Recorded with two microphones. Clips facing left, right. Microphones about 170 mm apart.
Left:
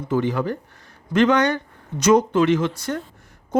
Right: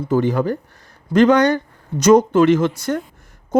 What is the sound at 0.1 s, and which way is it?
Speech, 40° right (ahead or behind).